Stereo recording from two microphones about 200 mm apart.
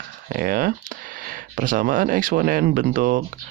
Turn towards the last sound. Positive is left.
turn(degrees=-45)  # may be behind; listen again after turning